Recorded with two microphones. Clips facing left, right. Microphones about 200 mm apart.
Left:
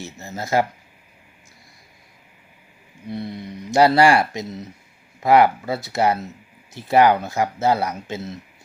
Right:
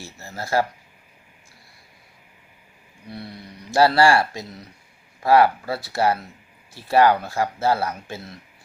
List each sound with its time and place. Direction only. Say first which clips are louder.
0.0 s speech: left 3 dB; 20° left (ahead or behind)
3.1 s speech: left 7 dB; 20° left (ahead or behind)